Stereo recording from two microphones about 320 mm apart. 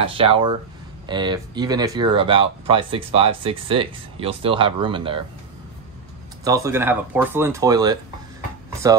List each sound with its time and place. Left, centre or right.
0.0 s speech: centre
6.4 s speech: centre